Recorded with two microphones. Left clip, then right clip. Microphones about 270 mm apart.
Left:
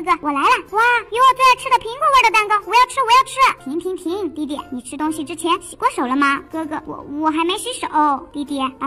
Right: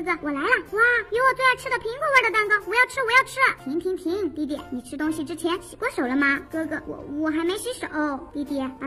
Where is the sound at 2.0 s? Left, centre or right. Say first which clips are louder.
Left 5 dB; centre.